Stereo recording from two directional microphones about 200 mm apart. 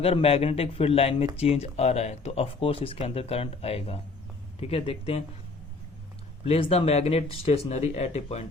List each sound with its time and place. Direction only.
0.0 s speech: 30° left (ahead or behind)
6.4 s speech: 30° left (ahead or behind)